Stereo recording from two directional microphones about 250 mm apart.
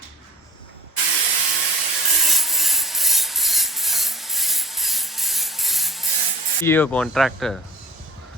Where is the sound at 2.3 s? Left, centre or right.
Centre.